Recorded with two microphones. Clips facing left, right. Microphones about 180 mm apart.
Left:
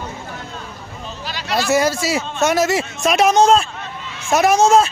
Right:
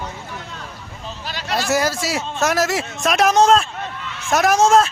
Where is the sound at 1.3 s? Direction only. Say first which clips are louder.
Left 2 dB; 50° right (ahead or behind).